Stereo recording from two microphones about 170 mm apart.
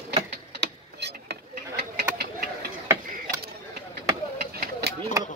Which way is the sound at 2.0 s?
70° right (ahead or behind).